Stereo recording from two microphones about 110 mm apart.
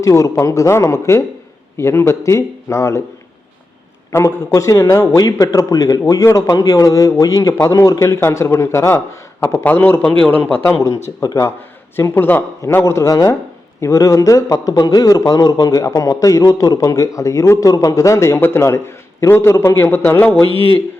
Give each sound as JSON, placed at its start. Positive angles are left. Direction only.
{"t": 0.0, "sound": "a man's voice", "side_deg": 30}
{"t": 4.1, "sound": "a man's voice", "side_deg": 25}
{"t": 10.8, "sound": "a man's voice", "side_deg": 30}